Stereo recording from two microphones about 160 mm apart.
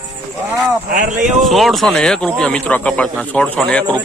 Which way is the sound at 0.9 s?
55° right (ahead or behind).